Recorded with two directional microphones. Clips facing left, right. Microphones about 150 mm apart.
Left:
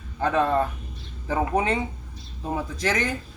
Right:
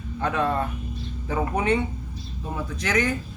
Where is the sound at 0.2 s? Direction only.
35° left (ahead or behind).